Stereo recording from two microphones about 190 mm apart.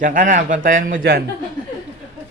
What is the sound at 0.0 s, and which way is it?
Speech, 45° right (ahead or behind).